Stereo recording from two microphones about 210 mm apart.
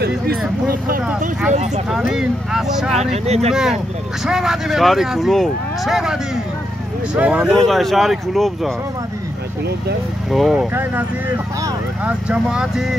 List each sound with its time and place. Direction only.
0.7 s speech: 40° right (ahead or behind)
1.9 s speech: 5° right (ahead or behind)
2.9 s speech: 30° right (ahead or behind)
4.3 s speech: centre (ahead or behind)
10.3 s speech: centre (ahead or behind)